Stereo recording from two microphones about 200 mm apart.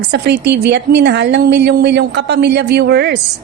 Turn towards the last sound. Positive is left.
turn(degrees=-55)  # may be behind; listen again after turning